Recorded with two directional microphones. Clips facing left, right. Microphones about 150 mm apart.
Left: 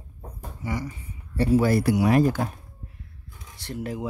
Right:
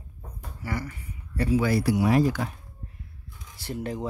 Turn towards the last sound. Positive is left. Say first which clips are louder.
# even
turn(degrees=5)  # may be behind; listen again after turning